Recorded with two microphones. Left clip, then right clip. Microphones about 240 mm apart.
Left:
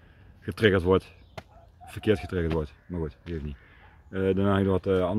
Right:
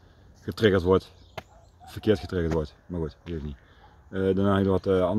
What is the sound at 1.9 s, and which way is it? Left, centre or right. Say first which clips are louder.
Speech: right 1 dB; centre.